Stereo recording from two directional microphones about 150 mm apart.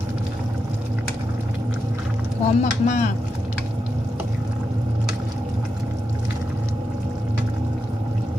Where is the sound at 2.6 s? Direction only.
55° left (ahead or behind).